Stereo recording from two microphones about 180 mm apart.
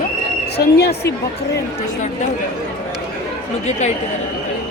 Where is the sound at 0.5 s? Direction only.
60° left (ahead or behind).